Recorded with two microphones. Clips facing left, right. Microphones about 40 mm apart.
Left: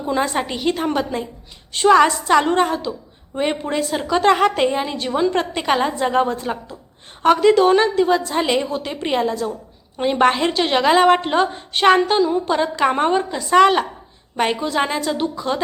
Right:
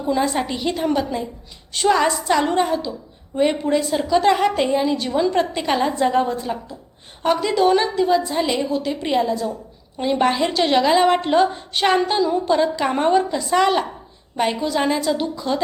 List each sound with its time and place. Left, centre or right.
0.0 s a woman's voice: left
3.3 s a woman's voice: left
4.0 s a woman's voice: left
6.3 s a woman's voice: left